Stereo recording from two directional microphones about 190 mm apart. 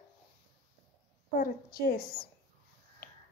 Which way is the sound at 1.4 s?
50° left (ahead or behind).